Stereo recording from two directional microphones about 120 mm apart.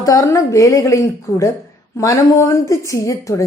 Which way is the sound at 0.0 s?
25° left (ahead or behind).